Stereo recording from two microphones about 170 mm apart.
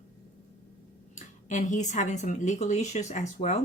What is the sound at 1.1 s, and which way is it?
A woman's voice, 45° left (ahead or behind).